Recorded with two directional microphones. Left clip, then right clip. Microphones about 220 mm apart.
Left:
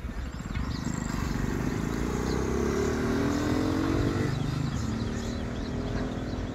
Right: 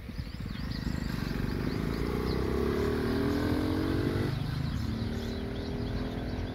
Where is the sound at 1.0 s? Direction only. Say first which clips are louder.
Left 3 dB; 45° left (ahead or behind).